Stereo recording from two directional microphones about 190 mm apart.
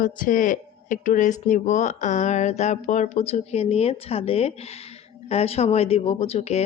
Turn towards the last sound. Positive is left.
turn(degrees=35)  # may be behind; listen again after turning